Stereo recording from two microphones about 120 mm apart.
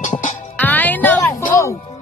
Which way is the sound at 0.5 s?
15° left (ahead or behind).